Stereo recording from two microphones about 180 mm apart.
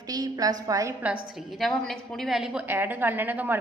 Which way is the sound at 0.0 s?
20° right (ahead or behind).